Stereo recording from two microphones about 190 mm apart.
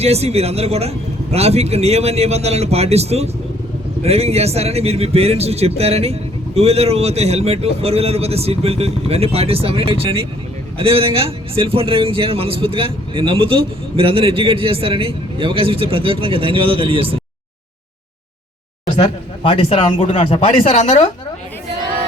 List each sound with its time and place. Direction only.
0.0 s a man's voice: 35° right (ahead or behind)
18.9 s speech: 30° left (ahead or behind)